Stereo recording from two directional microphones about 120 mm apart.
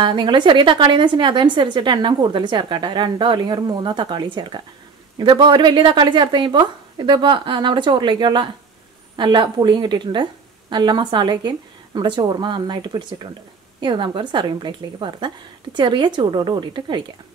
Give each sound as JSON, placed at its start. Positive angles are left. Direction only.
{"t": 0.0, "sound": "a woman's voice", "side_deg": -40}